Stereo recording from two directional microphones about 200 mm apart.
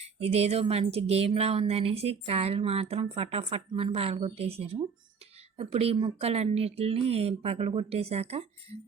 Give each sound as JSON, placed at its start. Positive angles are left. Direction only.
{"t": 0.0, "sound": "speech", "side_deg": -30}